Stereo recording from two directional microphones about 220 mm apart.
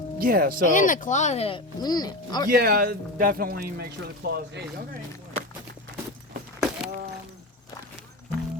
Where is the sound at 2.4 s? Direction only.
45° right (ahead or behind).